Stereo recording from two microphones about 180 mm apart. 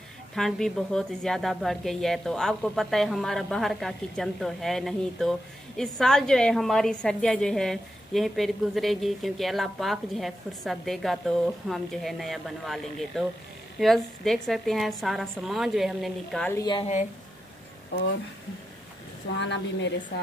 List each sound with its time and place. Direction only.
0.4 s a woman's voice: centre (ahead or behind)
16.5 s a woman's voice: 25° left (ahead or behind)
19.3 s a woman's voice: 80° left